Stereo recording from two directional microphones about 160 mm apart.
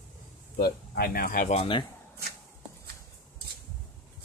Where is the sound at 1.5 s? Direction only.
45° left (ahead or behind).